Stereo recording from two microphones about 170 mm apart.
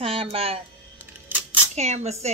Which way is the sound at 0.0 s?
35° right (ahead or behind).